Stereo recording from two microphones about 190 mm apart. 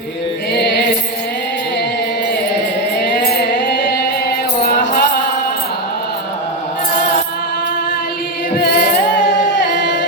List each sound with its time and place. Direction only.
3.0 s music: 60° left (ahead or behind)
8.5 s music: 60° left (ahead or behind)